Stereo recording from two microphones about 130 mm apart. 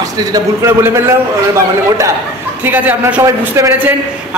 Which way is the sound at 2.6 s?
15° right (ahead or behind).